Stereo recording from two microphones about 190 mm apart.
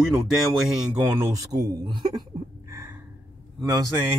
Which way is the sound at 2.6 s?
15° right (ahead or behind).